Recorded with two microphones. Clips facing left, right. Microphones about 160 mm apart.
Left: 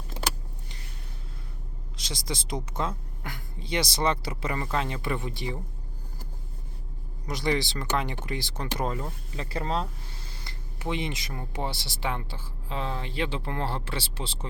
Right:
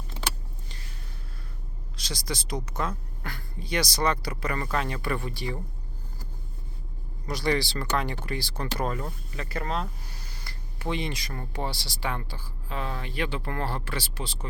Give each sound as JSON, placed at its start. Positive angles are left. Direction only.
{"t": 2.0, "sound": "speech", "side_deg": 20}
{"t": 7.3, "sound": "speech", "side_deg": 20}